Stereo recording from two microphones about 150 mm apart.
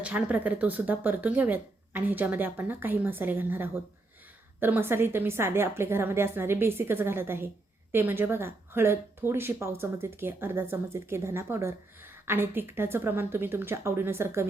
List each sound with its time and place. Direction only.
0.0 s a woman's voice: 10° right (ahead or behind)